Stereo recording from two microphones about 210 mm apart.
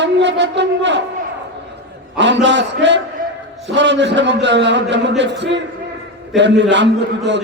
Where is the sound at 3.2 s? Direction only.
40° right (ahead or behind).